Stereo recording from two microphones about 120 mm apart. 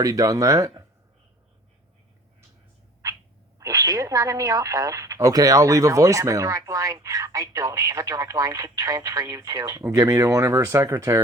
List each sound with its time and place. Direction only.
0.0 s speech: 30° right (ahead or behind)
3.6 s speech: 30° right (ahead or behind)